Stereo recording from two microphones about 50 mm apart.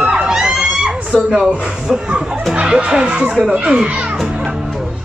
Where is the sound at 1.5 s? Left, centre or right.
Centre.